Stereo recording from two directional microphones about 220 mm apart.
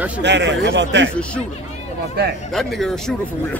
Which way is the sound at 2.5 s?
Centre (ahead or behind).